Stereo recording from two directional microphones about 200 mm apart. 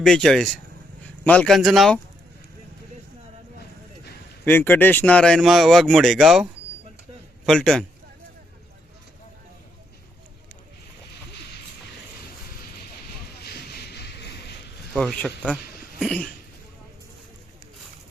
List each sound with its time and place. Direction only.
0.0 s speech: centre (ahead or behind)
4.4 s a man's voice: 10° left (ahead or behind)
13.4 s a sound: 50° left (ahead or behind)
14.9 s speech: 5° left (ahead or behind)